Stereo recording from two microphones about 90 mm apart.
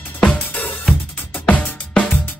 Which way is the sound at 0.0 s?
20° left (ahead or behind).